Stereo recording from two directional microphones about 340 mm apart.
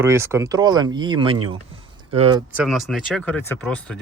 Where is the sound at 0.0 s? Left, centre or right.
Centre.